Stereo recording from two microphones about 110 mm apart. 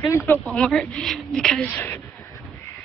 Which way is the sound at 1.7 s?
15° left (ahead or behind).